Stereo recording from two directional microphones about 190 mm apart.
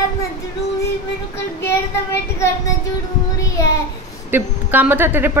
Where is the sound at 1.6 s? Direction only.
10° left (ahead or behind).